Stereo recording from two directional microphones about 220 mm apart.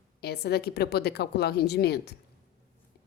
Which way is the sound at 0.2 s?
45° left (ahead or behind).